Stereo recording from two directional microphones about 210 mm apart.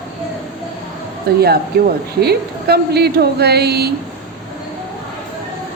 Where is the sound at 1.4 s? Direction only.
50° right (ahead or behind).